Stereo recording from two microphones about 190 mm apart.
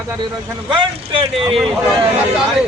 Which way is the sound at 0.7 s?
25° right (ahead or behind).